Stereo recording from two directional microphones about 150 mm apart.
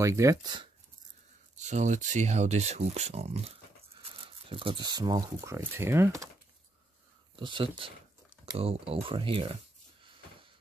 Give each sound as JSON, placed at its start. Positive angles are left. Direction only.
{"t": 0.0, "sound": "speech", "side_deg": -20}
{"t": 1.6, "sound": "speech", "side_deg": -55}
{"t": 7.3, "sound": "speech", "side_deg": -35}